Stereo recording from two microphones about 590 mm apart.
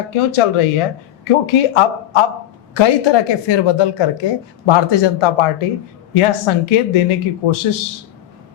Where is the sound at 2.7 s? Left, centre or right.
Left.